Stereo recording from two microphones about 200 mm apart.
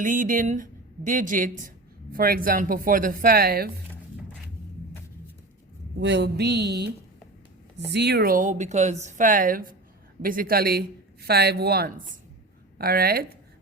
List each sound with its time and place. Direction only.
0.0 s speech: 40° right (ahead or behind)
6.0 s a sound: 60° right (ahead or behind)
7.9 s speech: 55° right (ahead or behind)